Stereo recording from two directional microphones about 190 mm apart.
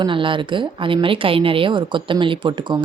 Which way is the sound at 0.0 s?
25° right (ahead or behind).